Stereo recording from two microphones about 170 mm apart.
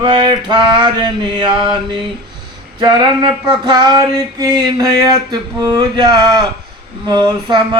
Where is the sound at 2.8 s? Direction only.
25° right (ahead or behind).